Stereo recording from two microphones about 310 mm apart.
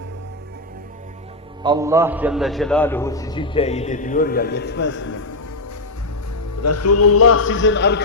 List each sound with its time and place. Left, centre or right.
1.6 s a man's voice: centre; by 5.1 s left
6.6 s a man's voice: left